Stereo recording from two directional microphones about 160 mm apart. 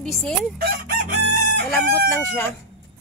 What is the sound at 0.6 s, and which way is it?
Chicken, 85° right.